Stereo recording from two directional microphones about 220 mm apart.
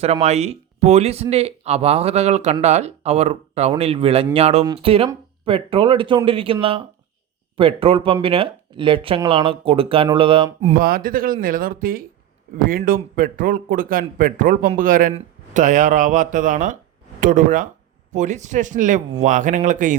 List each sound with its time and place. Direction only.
0.0 s a man's voice: 30° right (ahead or behind)